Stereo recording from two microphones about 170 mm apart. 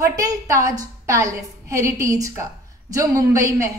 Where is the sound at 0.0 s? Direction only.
20° right (ahead or behind).